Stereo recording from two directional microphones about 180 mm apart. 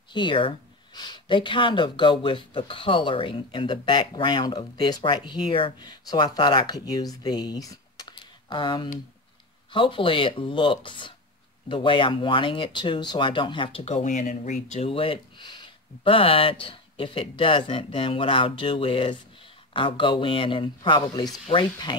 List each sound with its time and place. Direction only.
0.1 s speech: 25° left (ahead or behind)